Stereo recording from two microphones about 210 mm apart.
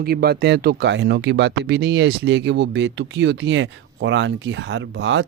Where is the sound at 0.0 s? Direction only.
50° right (ahead or behind).